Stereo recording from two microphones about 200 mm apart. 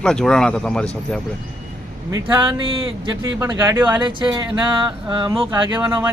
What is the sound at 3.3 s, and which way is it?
Speech, 15° right (ahead or behind).